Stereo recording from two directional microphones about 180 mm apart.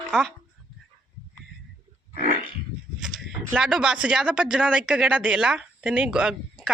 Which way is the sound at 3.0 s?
5° right (ahead or behind).